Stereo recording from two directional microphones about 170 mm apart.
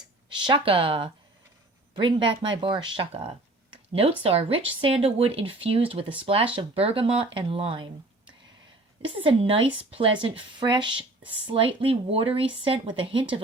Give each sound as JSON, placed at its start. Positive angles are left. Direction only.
{"t": 0.3, "sound": "a woman's voice", "side_deg": -30}
{"t": 9.0, "sound": "a woman's voice", "side_deg": -30}